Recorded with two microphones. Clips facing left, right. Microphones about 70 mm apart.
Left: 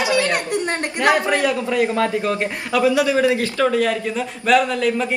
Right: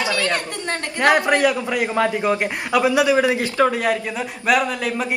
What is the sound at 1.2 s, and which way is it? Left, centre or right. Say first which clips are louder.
A man's voice: right 1 dB; right.